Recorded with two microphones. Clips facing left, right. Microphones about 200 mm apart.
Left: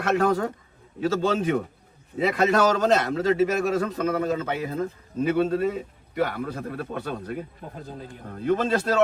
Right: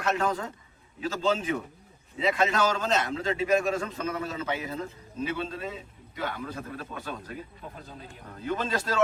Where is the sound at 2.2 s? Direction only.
60° left (ahead or behind).